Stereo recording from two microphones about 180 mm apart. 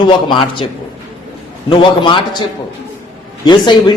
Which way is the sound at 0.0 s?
25° left (ahead or behind).